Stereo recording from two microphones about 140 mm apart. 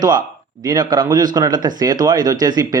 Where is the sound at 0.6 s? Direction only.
30° right (ahead or behind).